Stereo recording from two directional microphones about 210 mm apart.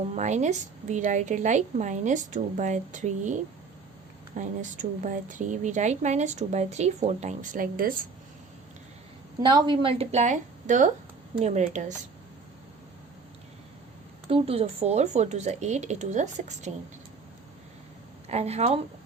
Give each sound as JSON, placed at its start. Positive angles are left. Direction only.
{"t": 0.1, "sound": "speech", "side_deg": -35}
{"t": 9.4, "sound": "speech", "side_deg": -20}
{"t": 14.3, "sound": "speech", "side_deg": -25}
{"t": 18.3, "sound": "speech", "side_deg": -30}